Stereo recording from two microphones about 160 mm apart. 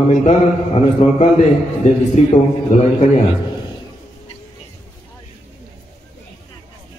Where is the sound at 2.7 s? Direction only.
40° left (ahead or behind).